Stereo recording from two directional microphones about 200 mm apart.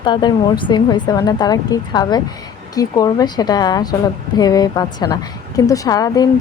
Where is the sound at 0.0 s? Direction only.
20° left (ahead or behind).